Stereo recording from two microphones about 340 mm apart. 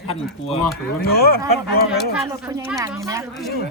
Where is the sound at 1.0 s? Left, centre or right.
Left.